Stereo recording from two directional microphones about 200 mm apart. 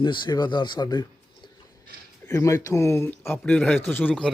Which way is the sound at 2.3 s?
15° left (ahead or behind).